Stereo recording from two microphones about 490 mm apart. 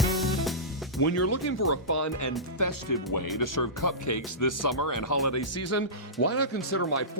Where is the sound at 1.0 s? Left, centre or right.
Left.